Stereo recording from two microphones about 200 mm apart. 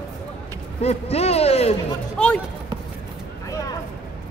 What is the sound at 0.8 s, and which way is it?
Speech, 30° left (ahead or behind).